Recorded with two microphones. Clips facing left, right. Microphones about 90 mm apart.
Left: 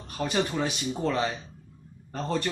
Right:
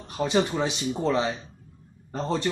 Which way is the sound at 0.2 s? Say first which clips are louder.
Right 3 dB; 20° right (ahead or behind).